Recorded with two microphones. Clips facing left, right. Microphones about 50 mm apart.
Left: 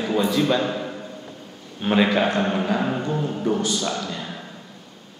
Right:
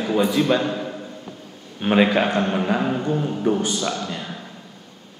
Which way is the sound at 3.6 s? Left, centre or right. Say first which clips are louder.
Right 1 dB; right.